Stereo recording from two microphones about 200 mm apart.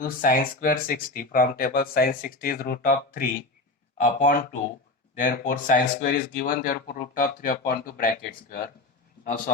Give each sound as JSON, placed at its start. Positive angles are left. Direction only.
{"t": 0.0, "sound": "speech", "side_deg": 45}